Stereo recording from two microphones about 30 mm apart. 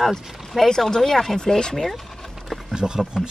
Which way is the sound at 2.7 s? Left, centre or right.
Right.